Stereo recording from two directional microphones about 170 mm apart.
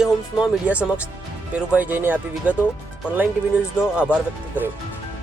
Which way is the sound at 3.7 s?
5° right (ahead or behind).